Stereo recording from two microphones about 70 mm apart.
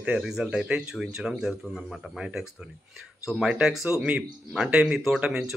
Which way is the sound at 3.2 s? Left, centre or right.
Centre.